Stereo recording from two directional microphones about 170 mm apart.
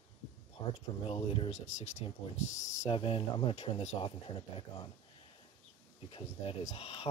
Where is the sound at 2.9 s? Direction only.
30° left (ahead or behind).